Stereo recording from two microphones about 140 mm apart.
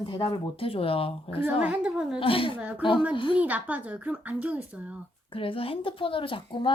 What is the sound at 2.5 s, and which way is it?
Speech, 10° right (ahead or behind).